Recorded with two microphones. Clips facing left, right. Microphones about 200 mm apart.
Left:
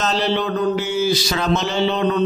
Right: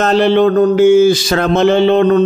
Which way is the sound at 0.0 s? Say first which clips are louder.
Right 10 dB; 55° right (ahead or behind).